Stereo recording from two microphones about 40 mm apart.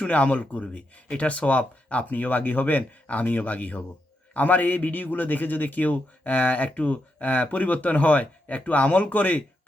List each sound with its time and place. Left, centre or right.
0.1 s a man's voice: left